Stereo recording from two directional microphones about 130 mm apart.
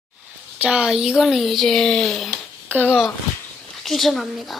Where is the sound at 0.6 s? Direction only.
10° right (ahead or behind).